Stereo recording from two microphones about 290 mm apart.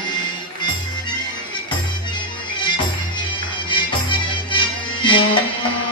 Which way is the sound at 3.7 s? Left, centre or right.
Centre.